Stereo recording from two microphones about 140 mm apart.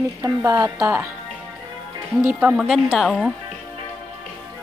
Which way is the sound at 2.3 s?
10° right (ahead or behind).